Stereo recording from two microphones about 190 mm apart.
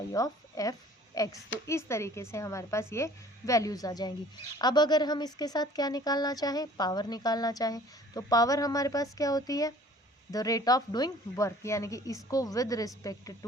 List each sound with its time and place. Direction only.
0.1 s a woman's voice: 20° left (ahead or behind)